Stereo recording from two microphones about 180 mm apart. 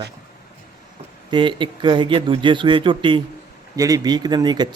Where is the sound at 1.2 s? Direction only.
25° right (ahead or behind).